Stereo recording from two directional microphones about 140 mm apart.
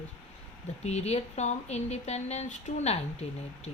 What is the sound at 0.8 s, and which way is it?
Speech, 50° left (ahead or behind).